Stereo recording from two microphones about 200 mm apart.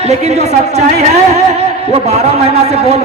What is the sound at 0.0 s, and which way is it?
A man's voice, 35° right (ahead or behind).